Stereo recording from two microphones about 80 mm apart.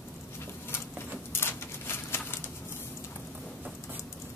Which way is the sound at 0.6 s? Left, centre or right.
Left.